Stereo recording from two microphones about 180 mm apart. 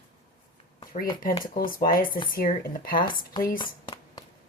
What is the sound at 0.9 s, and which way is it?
A woman's voice, 50° left (ahead or behind).